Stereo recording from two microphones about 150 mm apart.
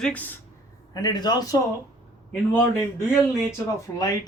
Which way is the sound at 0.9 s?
25° left (ahead or behind).